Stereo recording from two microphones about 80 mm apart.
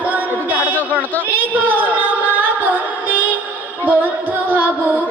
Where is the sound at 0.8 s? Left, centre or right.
Left.